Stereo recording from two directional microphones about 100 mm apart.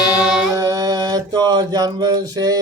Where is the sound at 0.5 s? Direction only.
40° right (ahead or behind).